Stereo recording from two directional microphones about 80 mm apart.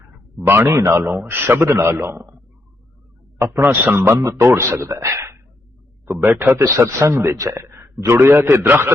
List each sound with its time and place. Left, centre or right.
0.4 s a man's voice: right
1.0 s a man's voice: right
3.5 s a man's voice: right
6.1 s a man's voice: right